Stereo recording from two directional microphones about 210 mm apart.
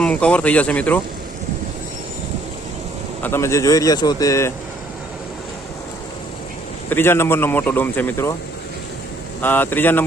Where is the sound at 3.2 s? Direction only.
10° left (ahead or behind).